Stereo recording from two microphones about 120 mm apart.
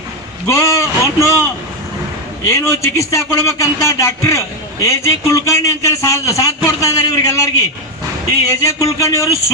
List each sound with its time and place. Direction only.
0.4 s speech: 25° left (ahead or behind)
2.5 s speech: 25° left (ahead or behind)